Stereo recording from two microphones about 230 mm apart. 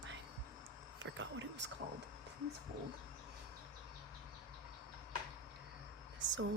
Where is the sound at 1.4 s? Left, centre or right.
Right.